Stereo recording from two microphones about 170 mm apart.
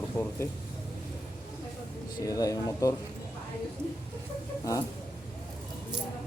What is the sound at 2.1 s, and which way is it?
Speech, 20° left (ahead or behind).